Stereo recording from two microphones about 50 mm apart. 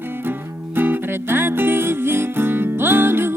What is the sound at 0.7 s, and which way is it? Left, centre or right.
Music, right.